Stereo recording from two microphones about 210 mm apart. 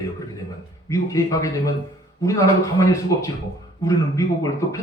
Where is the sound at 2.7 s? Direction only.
15° left (ahead or behind).